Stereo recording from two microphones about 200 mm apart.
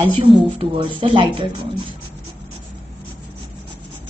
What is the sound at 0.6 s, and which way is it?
Speech, 25° right (ahead or behind).